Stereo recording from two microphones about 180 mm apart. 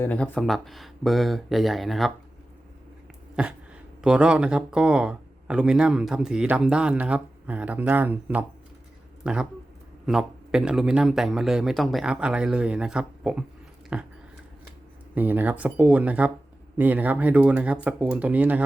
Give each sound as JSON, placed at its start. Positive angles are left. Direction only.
{"t": 0.0, "sound": "speech", "side_deg": 5}
{"t": 3.4, "sound": "speech", "side_deg": -5}
{"t": 13.9, "sound": "a sound", "side_deg": -5}
{"t": 15.1, "sound": "speech", "side_deg": -10}